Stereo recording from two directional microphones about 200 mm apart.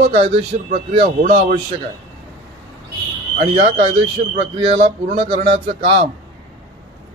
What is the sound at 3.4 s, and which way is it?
Speech, 30° right (ahead or behind).